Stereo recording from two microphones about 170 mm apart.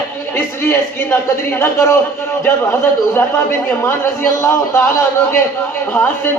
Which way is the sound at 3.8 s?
15° left (ahead or behind).